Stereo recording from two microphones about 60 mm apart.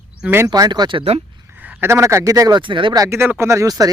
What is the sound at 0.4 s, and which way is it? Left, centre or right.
Speech, right.